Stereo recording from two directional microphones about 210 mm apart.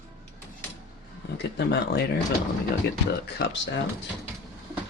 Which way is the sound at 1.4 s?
55° left (ahead or behind).